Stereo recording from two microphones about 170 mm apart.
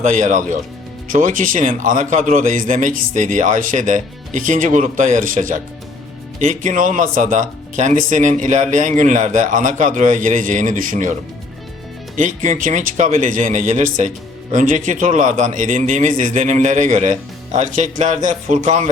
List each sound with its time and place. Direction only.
0.0 s speech: 45° right (ahead or behind)
12.1 s speech: 45° right (ahead or behind)